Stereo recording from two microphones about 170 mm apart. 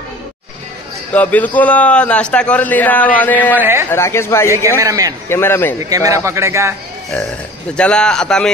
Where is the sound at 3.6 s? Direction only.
15° right (ahead or behind).